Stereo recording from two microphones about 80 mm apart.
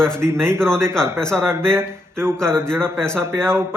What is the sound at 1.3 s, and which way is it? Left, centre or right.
Speech, right.